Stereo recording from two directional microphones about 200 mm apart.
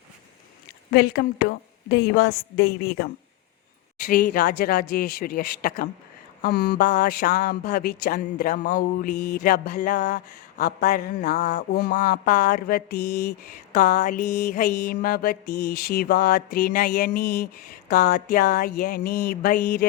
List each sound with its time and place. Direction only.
0.9 s mantra: 55° left (ahead or behind)
4.1 s mantra: 45° left (ahead or behind)
10.9 s mantra: 55° left (ahead or behind)
11.3 s mantra: 40° left (ahead or behind)